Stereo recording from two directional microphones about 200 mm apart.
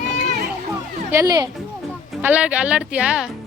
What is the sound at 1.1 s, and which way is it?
Speech, 15° right (ahead or behind).